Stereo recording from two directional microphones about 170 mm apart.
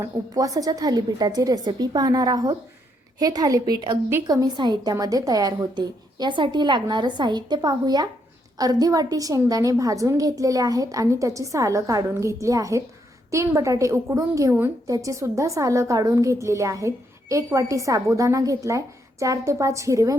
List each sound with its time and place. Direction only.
0.3 s a woman's voice: 20° right (ahead or behind)